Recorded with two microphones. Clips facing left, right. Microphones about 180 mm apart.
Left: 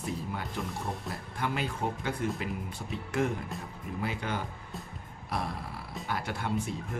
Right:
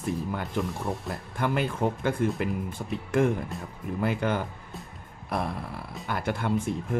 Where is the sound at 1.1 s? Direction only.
55° right (ahead or behind).